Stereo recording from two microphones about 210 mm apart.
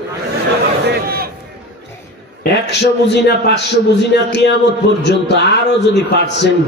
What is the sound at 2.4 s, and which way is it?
A man's voice, 55° left (ahead or behind).